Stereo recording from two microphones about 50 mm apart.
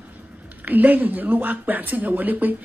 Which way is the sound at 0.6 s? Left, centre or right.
Right.